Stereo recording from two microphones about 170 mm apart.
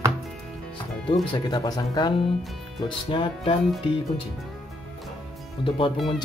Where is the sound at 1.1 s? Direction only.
25° left (ahead or behind).